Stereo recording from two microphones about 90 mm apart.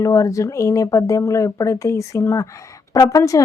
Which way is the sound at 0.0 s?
40° left (ahead or behind).